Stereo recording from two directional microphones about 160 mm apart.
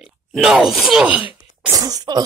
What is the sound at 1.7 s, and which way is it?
Cough, 20° right (ahead or behind).